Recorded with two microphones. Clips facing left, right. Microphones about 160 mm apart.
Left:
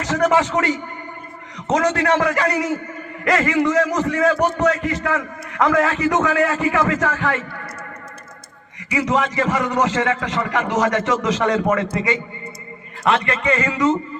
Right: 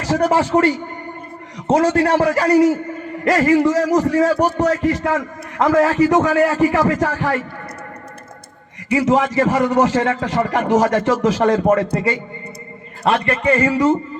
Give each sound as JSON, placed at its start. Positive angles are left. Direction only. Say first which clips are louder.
{"t": 0.0, "sound": "a man's voice", "louder": "right 1 dB", "side_deg": -30}
{"t": 8.9, "sound": "a man's voice", "louder": "right 4 dB", "side_deg": -30}
{"t": 13.1, "sound": "a man's voice", "louder": "right 2 dB", "side_deg": -30}